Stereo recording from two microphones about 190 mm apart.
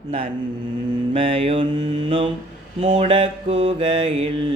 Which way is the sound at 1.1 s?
30° right (ahead or behind).